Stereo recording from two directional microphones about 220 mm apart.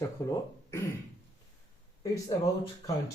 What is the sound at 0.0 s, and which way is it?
Speech, 15° left (ahead or behind).